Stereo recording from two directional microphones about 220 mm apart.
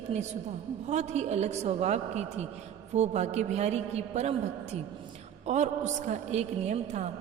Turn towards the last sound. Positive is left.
turn(degrees=-30)  # may be behind; listen again after turning